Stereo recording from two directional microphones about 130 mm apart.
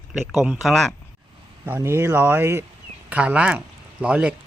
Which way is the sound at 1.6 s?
15° right (ahead or behind).